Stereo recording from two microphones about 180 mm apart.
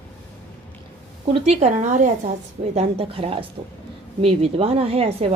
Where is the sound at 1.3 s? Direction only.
40° right (ahead or behind).